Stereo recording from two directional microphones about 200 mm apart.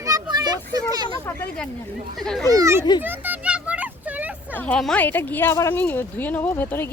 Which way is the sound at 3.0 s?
10° right (ahead or behind).